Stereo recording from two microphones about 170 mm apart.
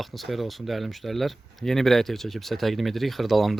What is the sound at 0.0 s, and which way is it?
Speech, centre (ahead or behind).